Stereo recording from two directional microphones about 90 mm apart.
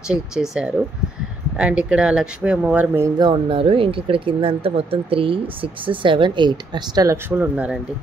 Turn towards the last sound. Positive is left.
turn(degrees=-30)  # may be behind; listen again after turning